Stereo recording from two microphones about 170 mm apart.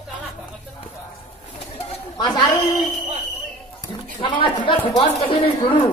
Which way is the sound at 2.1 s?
25° left (ahead or behind).